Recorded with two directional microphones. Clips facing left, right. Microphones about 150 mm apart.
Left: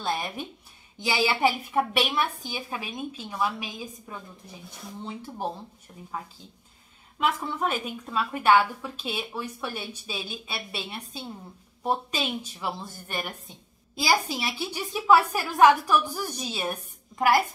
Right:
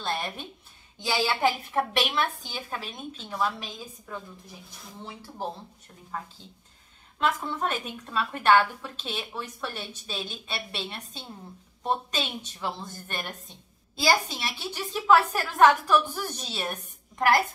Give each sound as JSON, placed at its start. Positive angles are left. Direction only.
{"t": 0.0, "sound": "a woman's voice", "side_deg": 10}
{"t": 7.2, "sound": "a woman's voice", "side_deg": 5}